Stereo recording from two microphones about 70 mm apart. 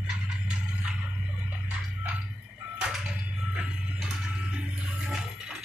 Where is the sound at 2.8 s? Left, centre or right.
Centre.